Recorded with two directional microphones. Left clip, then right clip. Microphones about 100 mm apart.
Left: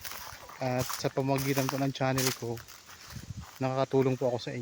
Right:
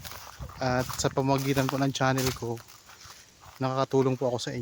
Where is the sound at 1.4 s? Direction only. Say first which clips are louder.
Right 3 dB; 30° right (ahead or behind).